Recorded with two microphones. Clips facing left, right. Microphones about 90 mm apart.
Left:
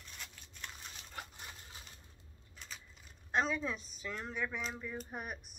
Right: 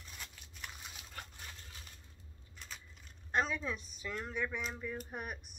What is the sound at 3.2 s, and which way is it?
Speech, centre (ahead or behind).